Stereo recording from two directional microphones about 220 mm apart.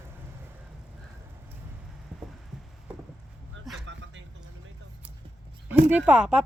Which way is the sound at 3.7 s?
55° right (ahead or behind).